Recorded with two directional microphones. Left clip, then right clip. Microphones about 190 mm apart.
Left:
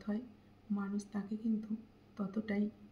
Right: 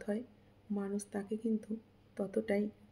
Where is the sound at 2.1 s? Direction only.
35° right (ahead or behind).